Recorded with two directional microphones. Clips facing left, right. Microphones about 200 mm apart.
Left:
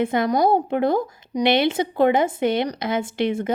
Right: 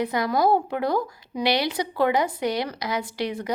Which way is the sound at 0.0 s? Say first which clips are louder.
Left 3 dB; 25° left (ahead or behind).